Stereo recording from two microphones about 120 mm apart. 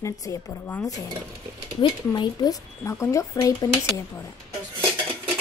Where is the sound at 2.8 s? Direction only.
25° left (ahead or behind).